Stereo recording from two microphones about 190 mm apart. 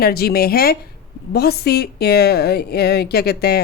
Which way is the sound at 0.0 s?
55° left (ahead or behind).